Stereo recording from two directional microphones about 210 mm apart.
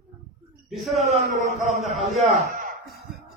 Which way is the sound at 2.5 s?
40° right (ahead or behind).